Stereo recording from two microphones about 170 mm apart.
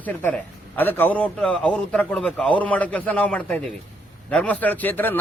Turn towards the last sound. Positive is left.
turn(degrees=10)  # may be behind; listen again after turning